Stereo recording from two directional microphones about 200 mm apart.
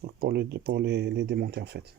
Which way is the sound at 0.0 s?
50° right (ahead or behind).